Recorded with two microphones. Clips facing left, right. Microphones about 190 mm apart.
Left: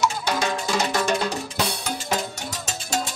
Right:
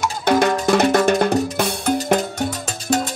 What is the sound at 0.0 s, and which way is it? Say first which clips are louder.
Music: right 7 dB; 55° right (ahead or behind).